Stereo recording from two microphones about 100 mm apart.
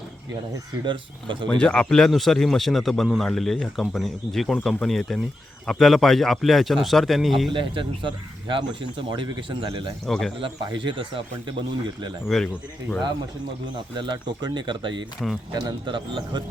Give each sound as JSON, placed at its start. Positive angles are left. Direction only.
{"t": 0.9, "sound": "speech", "side_deg": -55}
{"t": 1.5, "sound": "a man's voice", "side_deg": 10}
{"t": 7.5, "sound": "speech", "side_deg": -55}
{"t": 10.1, "sound": "a man's voice", "side_deg": 5}
{"t": 10.4, "sound": "speech", "side_deg": -55}
{"t": 12.3, "sound": "a man's voice", "side_deg": 0}
{"t": 13.9, "sound": "speech", "side_deg": -50}